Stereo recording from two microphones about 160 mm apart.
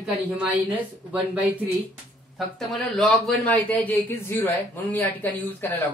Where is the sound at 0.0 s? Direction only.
10° right (ahead or behind).